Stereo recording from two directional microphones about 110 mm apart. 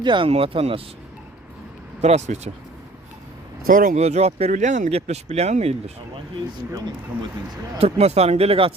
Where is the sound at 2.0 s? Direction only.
85° right.